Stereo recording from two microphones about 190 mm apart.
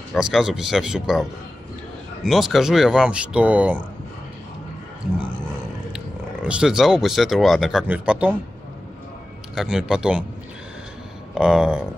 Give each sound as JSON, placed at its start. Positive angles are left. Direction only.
{"t": 0.1, "sound": "speech", "side_deg": 0}
{"t": 2.2, "sound": "speech", "side_deg": 0}
{"t": 5.9, "sound": "speech", "side_deg": -5}
{"t": 9.6, "sound": "speech", "side_deg": -5}
{"t": 11.3, "sound": "speech", "side_deg": 0}